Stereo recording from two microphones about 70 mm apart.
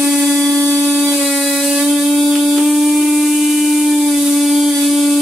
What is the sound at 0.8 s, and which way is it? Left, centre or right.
Ratchet, centre.